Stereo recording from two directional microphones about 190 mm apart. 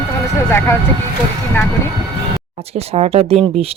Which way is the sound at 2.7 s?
30° right (ahead or behind).